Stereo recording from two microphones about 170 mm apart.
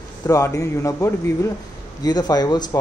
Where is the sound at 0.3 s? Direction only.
20° left (ahead or behind).